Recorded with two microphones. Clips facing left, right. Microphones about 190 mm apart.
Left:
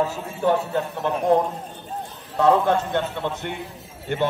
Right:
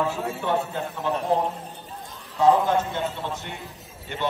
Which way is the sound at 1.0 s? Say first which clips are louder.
Even; 60° left (ahead or behind).